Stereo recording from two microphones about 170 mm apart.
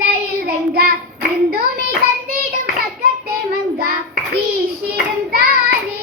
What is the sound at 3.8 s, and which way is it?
Child singing, 60° right (ahead or behind).